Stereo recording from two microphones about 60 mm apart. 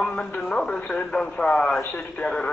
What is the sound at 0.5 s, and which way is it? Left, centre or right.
Radio, centre.